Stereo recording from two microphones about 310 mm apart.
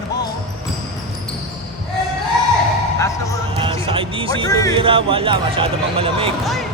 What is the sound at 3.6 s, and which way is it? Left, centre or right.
Music, centre.